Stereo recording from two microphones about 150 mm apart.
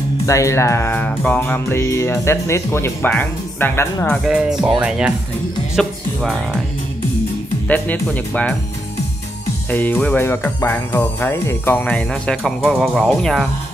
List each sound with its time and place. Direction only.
0.3 s music: 20° left (ahead or behind)
4.2 s speech: 5° right (ahead or behind)
7.6 s music: 10° left (ahead or behind)
9.7 s music: 10° left (ahead or behind)